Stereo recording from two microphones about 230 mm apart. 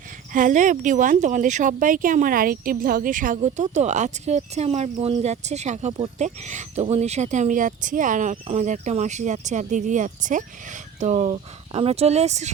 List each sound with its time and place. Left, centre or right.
0.3 s speech: right